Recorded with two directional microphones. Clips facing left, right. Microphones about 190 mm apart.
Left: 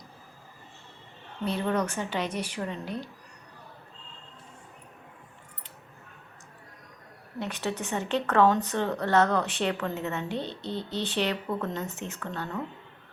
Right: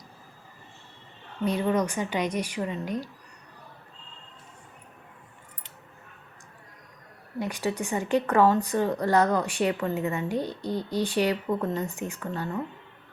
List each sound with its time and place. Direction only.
1.5 s speech: 10° right (ahead or behind)
7.3 s speech: 10° right (ahead or behind)